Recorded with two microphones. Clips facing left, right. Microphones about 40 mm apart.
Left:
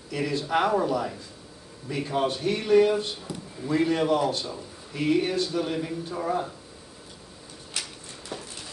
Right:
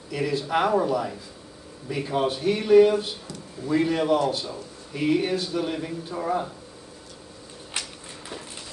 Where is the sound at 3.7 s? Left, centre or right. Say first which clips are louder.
Right 1 dB; centre.